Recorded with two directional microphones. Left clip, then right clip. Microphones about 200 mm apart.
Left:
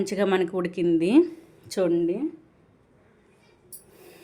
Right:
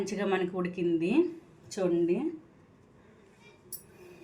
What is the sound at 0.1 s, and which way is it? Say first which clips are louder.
Speech: left 8 dB; 60° left (ahead or behind).